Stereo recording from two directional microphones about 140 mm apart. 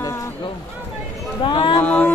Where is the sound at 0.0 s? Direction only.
20° left (ahead or behind).